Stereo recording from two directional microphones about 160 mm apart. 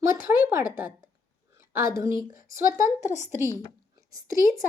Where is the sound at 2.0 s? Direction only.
20° right (ahead or behind).